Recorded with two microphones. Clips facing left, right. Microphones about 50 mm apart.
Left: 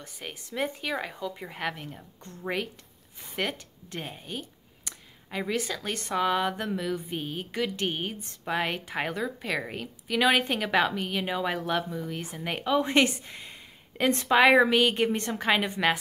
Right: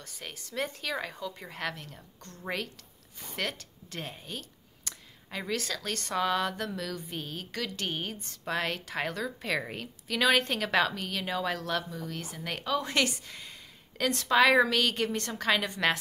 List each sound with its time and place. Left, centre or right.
0.0 s a woman's voice: centre